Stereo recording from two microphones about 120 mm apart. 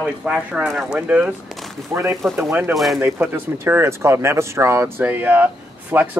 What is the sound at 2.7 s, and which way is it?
Speech, centre (ahead or behind).